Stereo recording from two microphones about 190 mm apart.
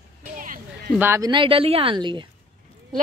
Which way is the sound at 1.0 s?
15° right (ahead or behind).